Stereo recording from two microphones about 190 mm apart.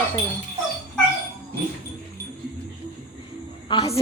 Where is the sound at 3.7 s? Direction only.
25° left (ahead or behind).